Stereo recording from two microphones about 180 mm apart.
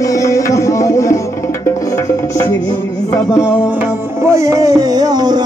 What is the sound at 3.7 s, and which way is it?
Music, 15° right (ahead or behind).